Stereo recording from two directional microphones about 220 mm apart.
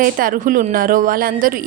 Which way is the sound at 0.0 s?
40° right (ahead or behind).